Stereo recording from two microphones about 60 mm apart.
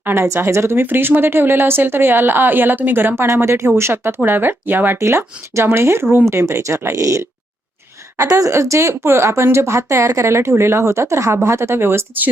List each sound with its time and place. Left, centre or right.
0.0 s speech: right
0.3 s a woman's voice: right
0.8 s speech: right
3.2 s a woman's voice: right
4.2 s speech: right
4.9 s a woman's voice: right
6.3 s speech: right
8.3 s a woman's voice: right